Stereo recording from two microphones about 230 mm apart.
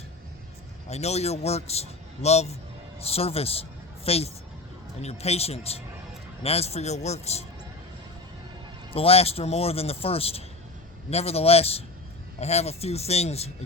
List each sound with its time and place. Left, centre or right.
0.9 s a man's voice: left
8.9 s a man's voice: left